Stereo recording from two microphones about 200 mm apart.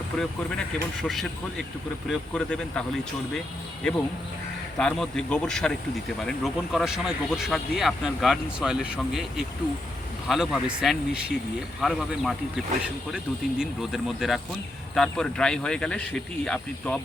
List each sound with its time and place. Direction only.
0.1 s speech: centre (ahead or behind)
4.8 s speech: 5° left (ahead or behind)
10.2 s speech: centre (ahead or behind)